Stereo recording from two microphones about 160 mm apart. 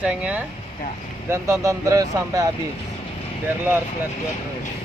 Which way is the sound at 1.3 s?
20° right (ahead or behind).